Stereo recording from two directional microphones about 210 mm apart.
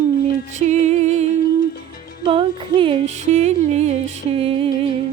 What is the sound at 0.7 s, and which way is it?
Music, 35° right (ahead or behind).